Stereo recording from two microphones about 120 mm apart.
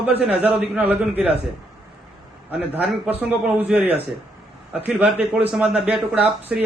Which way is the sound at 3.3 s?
15° right (ahead or behind).